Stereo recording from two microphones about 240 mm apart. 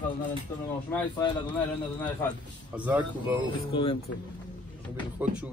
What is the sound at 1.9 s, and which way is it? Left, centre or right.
Speech, centre.